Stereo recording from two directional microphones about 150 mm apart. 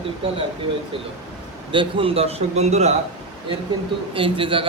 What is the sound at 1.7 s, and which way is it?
A man's voice, 35° right (ahead or behind).